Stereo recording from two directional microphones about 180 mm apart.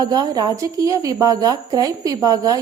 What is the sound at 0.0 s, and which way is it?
A woman's voice, 20° right (ahead or behind).